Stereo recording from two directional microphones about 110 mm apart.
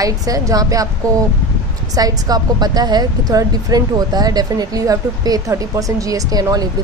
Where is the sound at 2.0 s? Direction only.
35° right (ahead or behind).